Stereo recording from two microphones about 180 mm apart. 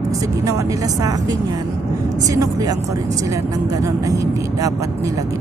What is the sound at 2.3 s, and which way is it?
Speech, 20° right (ahead or behind).